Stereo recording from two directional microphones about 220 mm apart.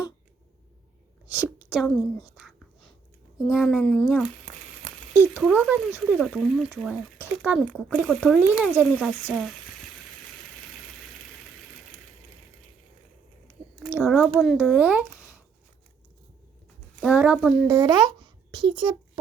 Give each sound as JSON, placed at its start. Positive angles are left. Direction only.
{"t": 1.5, "sound": "a woman's voice", "side_deg": 0}
{"t": 2.3, "sound": "whispering", "side_deg": 0}
{"t": 3.5, "sound": "speech", "side_deg": 0}
{"t": 13.9, "sound": "speech", "side_deg": -5}
{"t": 17.0, "sound": "speech", "side_deg": -5}
{"t": 17.7, "sound": "a child's voice", "side_deg": -15}